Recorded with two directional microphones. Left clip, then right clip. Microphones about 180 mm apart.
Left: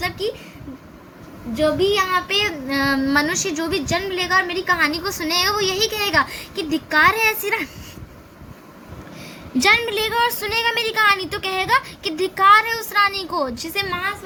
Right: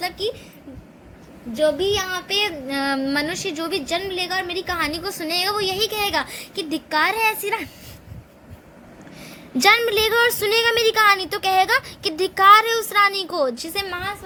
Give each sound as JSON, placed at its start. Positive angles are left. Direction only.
{"t": 1.5, "sound": "speech", "side_deg": -40}
{"t": 9.2, "sound": "speech", "side_deg": -30}